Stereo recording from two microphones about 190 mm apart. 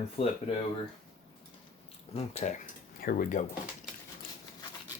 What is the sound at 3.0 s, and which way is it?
Speech, 50° left (ahead or behind).